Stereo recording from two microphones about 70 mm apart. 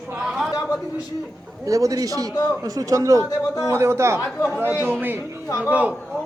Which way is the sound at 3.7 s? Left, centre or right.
Right.